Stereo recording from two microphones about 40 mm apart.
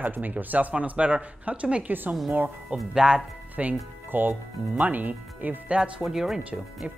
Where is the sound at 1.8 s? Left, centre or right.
Right.